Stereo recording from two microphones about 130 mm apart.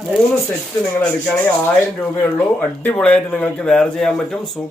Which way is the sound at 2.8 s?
10° left (ahead or behind).